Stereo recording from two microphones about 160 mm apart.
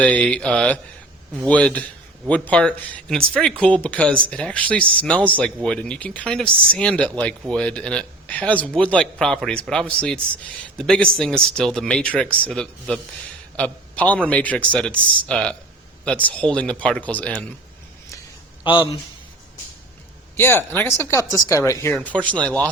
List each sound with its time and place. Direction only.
0.0 s a man's voice: 10° left (ahead or behind)
18.6 s a man's voice: 30° left (ahead or behind)
20.3 s speech: 15° left (ahead or behind)